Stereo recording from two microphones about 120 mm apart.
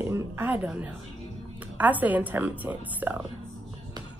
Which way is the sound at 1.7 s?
15° right (ahead or behind).